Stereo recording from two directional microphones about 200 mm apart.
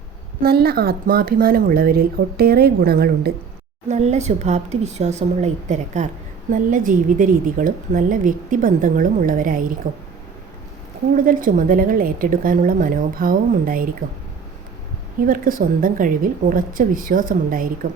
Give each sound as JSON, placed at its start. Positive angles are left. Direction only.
{"t": 0.4, "sound": "a woman's voice", "side_deg": -50}
{"t": 3.8, "sound": "a woman's voice", "side_deg": -35}
{"t": 11.3, "sound": "a woman's voice", "side_deg": -45}
{"t": 15.3, "sound": "a woman's voice", "side_deg": -45}